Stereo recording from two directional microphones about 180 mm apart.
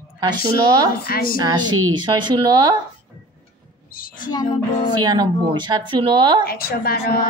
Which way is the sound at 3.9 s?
55° left (ahead or behind).